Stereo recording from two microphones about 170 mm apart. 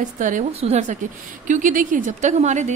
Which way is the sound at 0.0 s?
50° right (ahead or behind).